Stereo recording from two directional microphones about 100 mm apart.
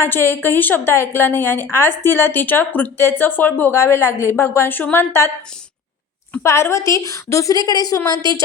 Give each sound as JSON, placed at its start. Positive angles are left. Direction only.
{"t": 0.0, "sound": "a woman's voice", "side_deg": 25}
{"t": 6.4, "sound": "a woman's voice", "side_deg": 25}